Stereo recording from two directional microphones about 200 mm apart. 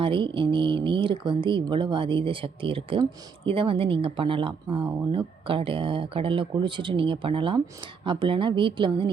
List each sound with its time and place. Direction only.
0.0 s speech: 25° right (ahead or behind)